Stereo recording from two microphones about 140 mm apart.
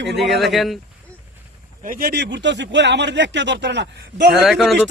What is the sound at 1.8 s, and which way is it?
Speech, 85° right.